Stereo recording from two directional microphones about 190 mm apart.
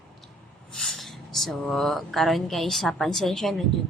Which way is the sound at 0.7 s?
Centre (ahead or behind).